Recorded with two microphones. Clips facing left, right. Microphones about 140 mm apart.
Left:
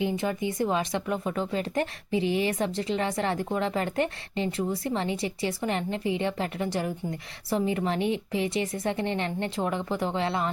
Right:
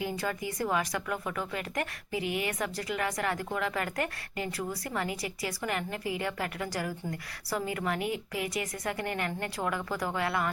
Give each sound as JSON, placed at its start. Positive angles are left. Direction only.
{"t": 0.0, "sound": "speech", "side_deg": 20}